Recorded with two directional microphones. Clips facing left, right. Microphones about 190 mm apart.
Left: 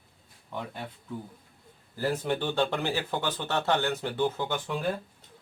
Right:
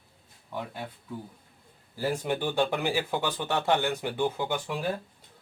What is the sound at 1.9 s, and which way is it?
Speech, 10° right (ahead or behind).